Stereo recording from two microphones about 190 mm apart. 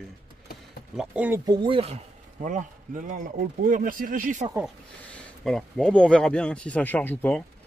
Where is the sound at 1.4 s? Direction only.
25° right (ahead or behind); by 4.5 s 45° right (ahead or behind).